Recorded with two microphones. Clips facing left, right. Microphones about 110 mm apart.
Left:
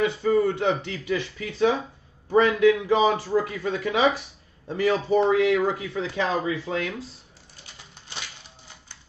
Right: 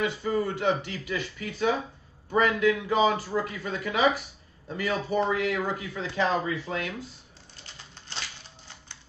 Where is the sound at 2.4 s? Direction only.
25° left (ahead or behind).